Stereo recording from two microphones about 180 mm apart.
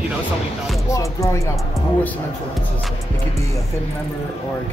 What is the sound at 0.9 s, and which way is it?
Speech, 15° left (ahead or behind).